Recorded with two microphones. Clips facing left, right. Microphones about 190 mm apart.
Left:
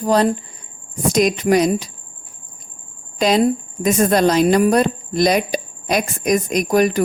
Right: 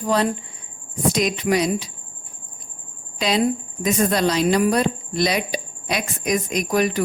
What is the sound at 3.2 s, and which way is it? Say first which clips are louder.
Speech: left 5 dB; 45° left (ahead or behind).